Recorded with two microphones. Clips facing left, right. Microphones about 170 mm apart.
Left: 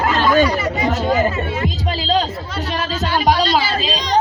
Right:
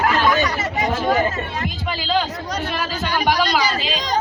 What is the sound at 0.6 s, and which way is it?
Chatter, 45° right (ahead or behind).